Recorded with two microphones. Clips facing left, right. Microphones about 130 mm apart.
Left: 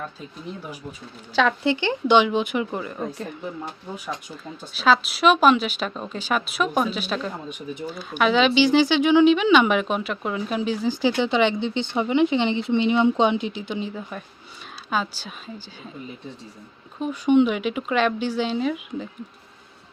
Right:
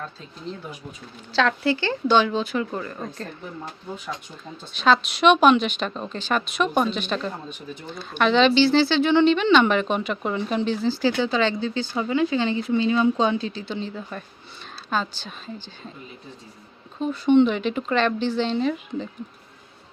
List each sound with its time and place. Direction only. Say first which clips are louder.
0.0 s speech: left 1 dB; 5° left (ahead or behind)
4.6 s a woman's voice: even; 5° left (ahead or behind)
17.0 s speech: right 1 dB; 10° left (ahead or behind)